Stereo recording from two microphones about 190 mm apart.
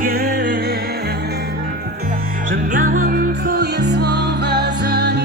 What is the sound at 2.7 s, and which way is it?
Music, 45° right (ahead or behind).